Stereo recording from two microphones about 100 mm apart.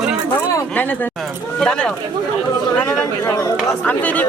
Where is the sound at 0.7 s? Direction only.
15° left (ahead or behind).